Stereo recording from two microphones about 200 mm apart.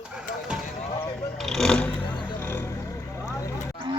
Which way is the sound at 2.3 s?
10° left (ahead or behind).